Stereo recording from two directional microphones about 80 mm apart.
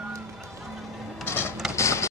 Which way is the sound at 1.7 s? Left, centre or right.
Left.